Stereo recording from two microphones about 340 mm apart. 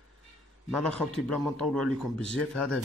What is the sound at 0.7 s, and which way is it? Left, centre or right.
Speech, centre.